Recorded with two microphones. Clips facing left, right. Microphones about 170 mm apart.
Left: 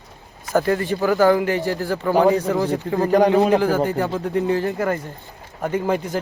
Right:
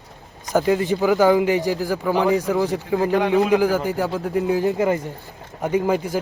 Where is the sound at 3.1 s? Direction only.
40° left (ahead or behind).